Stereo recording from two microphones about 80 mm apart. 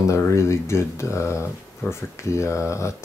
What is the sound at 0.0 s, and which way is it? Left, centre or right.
Speech, left.